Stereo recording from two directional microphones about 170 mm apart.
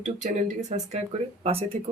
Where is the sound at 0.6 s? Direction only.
45° right (ahead or behind).